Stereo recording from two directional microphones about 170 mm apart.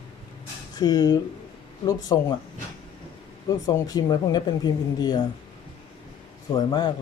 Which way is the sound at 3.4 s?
20° left (ahead or behind).